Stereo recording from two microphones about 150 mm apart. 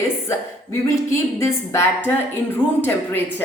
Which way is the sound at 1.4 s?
15° left (ahead or behind).